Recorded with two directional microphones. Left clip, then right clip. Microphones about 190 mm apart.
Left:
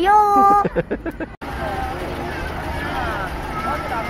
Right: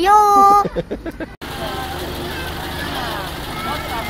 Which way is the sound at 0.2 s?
25° left (ahead or behind).